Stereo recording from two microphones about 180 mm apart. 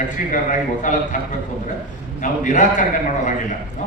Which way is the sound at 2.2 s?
45° left (ahead or behind).